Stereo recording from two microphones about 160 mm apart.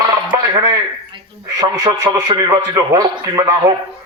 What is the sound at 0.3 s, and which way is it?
Speech, 25° right (ahead or behind).